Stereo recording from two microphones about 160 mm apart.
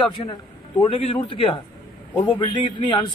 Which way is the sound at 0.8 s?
35° left (ahead or behind).